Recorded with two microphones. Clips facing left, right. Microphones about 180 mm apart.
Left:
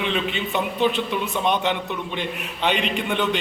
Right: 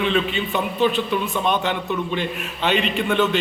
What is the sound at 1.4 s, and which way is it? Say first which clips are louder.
A man's voice: even; 20° left (ahead or behind).